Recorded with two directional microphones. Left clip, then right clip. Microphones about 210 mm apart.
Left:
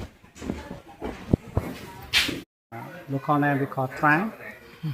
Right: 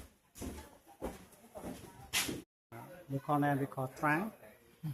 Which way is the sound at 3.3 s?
25° left (ahead or behind).